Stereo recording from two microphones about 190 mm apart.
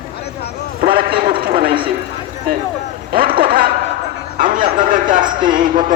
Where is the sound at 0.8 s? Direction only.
50° right (ahead or behind).